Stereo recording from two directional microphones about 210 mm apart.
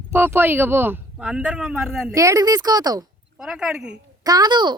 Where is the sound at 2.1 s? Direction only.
15° right (ahead or behind).